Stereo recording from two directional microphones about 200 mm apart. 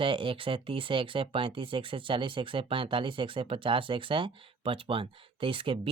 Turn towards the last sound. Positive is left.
turn(degrees=-25)  # may be behind; listen again after turning